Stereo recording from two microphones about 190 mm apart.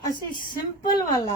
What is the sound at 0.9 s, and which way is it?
Speech, 20° left (ahead or behind).